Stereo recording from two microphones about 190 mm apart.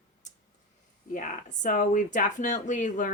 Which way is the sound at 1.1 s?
45° left (ahead or behind).